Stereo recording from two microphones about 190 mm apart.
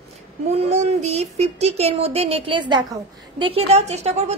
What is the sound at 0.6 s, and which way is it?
Speech, 35° right (ahead or behind).